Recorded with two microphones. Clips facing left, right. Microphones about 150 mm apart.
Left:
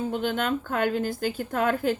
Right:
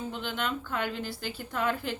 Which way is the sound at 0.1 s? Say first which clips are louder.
Left 7 dB; 50° left (ahead or behind).